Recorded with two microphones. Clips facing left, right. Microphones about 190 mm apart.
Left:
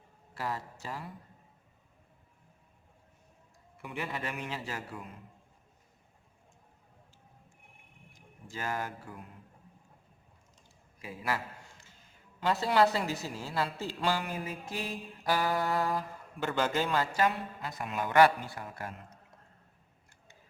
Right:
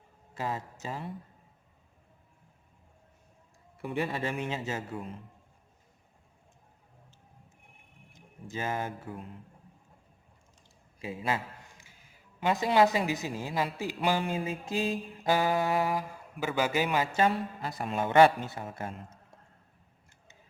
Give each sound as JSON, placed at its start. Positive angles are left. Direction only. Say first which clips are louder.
{"t": 0.3, "sound": "a man's voice", "louder": "right 2 dB", "side_deg": -20}
{"t": 3.8, "sound": "a man's voice", "louder": "right 6 dB", "side_deg": -30}
{"t": 8.1, "sound": "a man's voice", "louder": "right 5 dB", "side_deg": -20}
{"t": 11.0, "sound": "a man's voice", "louder": "right 3 dB", "side_deg": -25}
{"t": 12.4, "sound": "a woman's voice", "louder": "right 2 dB", "side_deg": -15}
{"t": 17.1, "sound": "a man's voice", "louder": "right 3 dB", "side_deg": -25}